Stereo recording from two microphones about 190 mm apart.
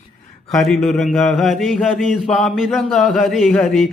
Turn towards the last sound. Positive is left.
turn(degrees=0)  # may be behind; listen again after turning